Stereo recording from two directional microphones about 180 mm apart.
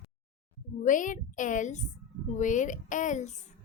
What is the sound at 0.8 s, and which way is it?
A woman's voice, 45° left (ahead or behind).